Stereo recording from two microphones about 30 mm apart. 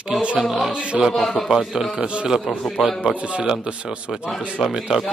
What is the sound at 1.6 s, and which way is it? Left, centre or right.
Speech, centre.